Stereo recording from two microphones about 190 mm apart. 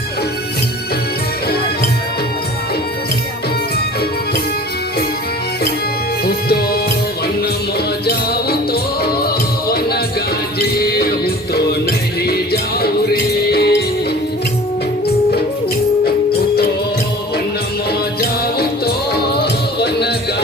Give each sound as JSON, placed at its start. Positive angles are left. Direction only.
{"t": 8.0, "sound": "music", "side_deg": 55}
{"t": 18.2, "sound": "music", "side_deg": 55}